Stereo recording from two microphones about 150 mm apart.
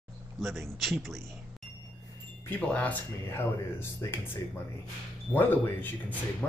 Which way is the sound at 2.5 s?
10° left (ahead or behind).